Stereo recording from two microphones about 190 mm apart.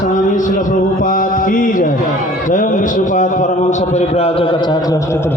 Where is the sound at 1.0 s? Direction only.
45° left (ahead or behind).